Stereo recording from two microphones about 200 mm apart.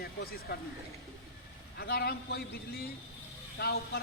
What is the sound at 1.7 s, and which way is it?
Speech, 50° left (ahead or behind).